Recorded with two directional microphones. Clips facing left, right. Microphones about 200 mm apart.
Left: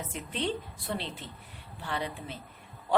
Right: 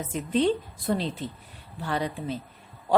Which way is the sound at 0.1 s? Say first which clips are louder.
Right 11 dB; 40° right (ahead or behind).